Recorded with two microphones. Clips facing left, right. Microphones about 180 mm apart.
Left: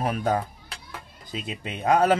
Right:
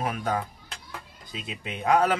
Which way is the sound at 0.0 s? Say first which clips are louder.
Left 4 dB; 35° left (ahead or behind).